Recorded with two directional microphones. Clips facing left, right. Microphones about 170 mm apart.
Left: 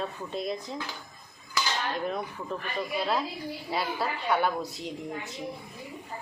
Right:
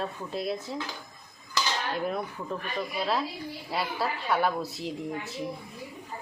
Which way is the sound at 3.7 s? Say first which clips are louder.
Even; centre (ahead or behind).